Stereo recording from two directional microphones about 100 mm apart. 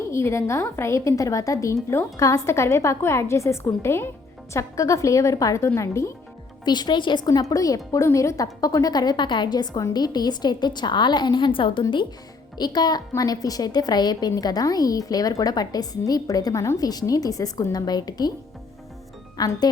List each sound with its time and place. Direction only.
0.1 s a woman's voice: 30° left (ahead or behind)
6.7 s a woman's voice: 50° left (ahead or behind)
7.5 s a woman's voice: 35° left (ahead or behind); by 11.8 s 55° left (ahead or behind)
12.5 s a woman's voice: 45° left (ahead or behind)
19.4 s a woman's voice: 40° left (ahead or behind)